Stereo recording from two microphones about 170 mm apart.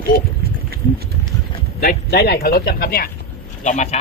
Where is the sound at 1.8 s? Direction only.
60° left (ahead or behind).